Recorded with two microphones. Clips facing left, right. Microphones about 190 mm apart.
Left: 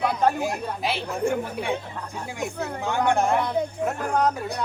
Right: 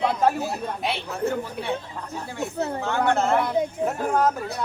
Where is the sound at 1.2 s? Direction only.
15° left (ahead or behind).